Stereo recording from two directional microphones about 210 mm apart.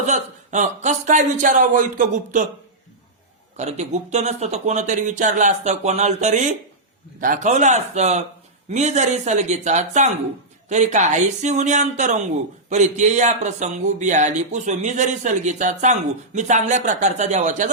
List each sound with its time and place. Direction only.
0.0 s speech: 35° right (ahead or behind)
3.6 s speech: 30° right (ahead or behind)